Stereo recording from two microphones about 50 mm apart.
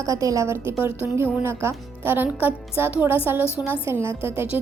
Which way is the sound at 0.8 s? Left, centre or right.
Right.